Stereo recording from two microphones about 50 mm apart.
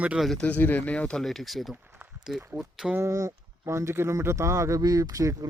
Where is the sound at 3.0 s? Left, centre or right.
Right.